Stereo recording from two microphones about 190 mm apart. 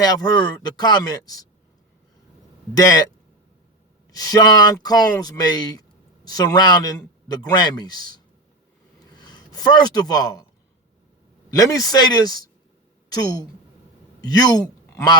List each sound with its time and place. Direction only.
0.0 s speech: 20° left (ahead or behind)
2.7 s speech: 20° left (ahead or behind)
4.1 s speech: 20° left (ahead or behind)
9.2 s speech: 20° left (ahead or behind)
11.5 s a woman's voice: 20° left (ahead or behind)